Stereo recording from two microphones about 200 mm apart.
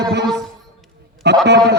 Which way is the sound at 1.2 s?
55° right (ahead or behind).